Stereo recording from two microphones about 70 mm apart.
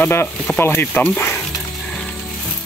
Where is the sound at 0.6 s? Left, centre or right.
Left.